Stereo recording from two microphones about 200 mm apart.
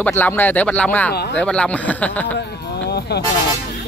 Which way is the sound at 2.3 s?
55° left (ahead or behind).